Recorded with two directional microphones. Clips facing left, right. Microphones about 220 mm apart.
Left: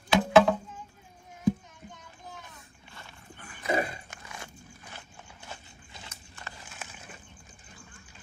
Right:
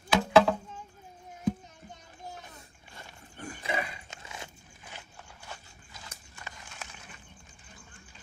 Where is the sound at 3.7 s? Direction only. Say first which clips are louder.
Left 6 dB; 45° left (ahead or behind).